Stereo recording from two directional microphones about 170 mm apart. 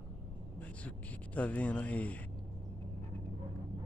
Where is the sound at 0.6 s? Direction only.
10° left (ahead or behind).